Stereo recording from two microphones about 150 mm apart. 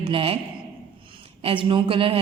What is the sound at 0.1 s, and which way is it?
Speech, 40° right (ahead or behind).